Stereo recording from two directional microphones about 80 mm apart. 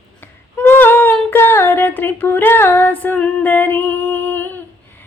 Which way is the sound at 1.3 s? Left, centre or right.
Left.